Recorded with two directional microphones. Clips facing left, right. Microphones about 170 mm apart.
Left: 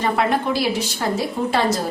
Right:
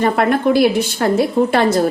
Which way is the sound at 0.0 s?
55° right (ahead or behind).